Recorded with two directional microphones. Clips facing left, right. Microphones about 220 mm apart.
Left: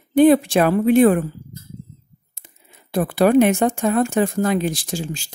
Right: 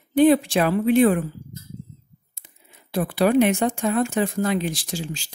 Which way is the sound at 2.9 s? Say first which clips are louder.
Left 4 dB; 50° left (ahead or behind).